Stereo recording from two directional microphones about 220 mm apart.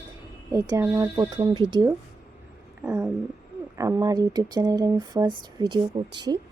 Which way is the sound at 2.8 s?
5° right (ahead or behind).